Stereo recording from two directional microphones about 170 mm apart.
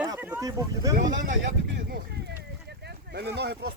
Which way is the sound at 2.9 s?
75° right (ahead or behind).